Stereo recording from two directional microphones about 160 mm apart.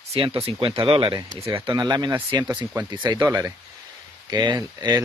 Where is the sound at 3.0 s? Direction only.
25° right (ahead or behind).